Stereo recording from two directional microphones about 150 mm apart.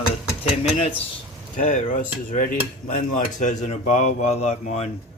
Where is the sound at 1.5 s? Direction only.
60° left (ahead or behind).